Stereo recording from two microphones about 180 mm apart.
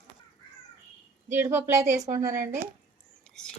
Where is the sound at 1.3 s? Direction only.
15° right (ahead or behind).